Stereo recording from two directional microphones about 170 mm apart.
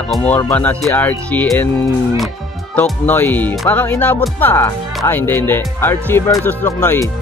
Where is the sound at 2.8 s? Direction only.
10° left (ahead or behind).